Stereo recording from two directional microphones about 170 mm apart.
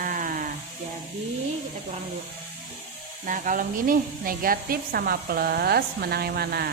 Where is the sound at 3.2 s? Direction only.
50° right (ahead or behind).